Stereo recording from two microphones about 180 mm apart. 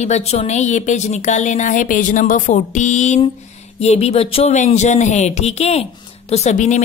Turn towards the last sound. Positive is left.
turn(degrees=40)  # may be behind; listen again after turning